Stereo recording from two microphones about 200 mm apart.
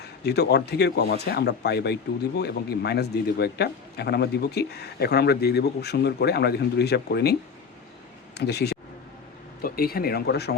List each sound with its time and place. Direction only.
0.0 s speech: 55° left (ahead or behind)
8.4 s speech: 55° left (ahead or behind)